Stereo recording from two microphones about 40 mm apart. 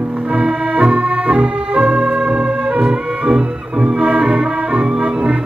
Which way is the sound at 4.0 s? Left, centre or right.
Right.